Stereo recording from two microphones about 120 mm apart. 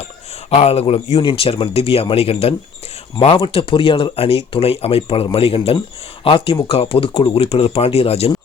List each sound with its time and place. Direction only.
0.5 s speech: 65° left (ahead or behind)